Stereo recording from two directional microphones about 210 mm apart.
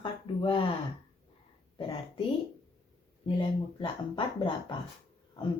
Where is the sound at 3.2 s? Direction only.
20° left (ahead or behind).